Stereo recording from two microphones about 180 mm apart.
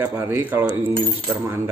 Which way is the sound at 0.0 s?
10° right (ahead or behind).